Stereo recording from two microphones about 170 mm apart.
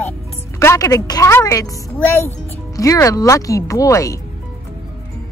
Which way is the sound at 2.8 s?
20° left (ahead or behind).